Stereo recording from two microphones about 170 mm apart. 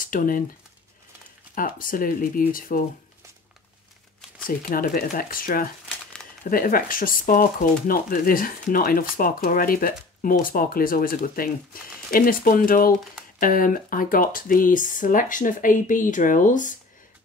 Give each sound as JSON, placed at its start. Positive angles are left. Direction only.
{"t": 0.0, "sound": "speech", "side_deg": 55}
{"t": 1.5, "sound": "speech", "side_deg": 55}
{"t": 4.5, "sound": "speech", "side_deg": 55}